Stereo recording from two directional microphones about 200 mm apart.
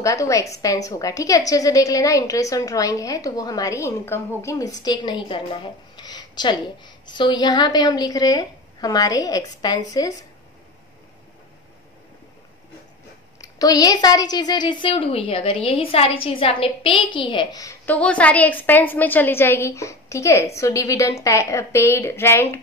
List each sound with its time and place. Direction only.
0.0 s a woman's voice: 15° left (ahead or behind)
13.4 s a woman's voice: 20° left (ahead or behind)